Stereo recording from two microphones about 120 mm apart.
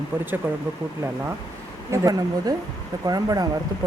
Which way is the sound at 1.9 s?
30° right (ahead or behind).